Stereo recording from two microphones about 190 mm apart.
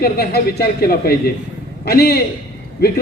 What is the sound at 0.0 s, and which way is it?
A man's voice, 55° left (ahead or behind).